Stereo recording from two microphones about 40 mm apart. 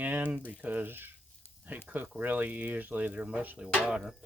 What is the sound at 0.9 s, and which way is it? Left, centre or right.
Cutlery, right.